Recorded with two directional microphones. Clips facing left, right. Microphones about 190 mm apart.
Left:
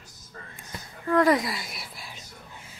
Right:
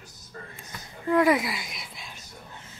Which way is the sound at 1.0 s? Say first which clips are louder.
Even; 10° right (ahead or behind).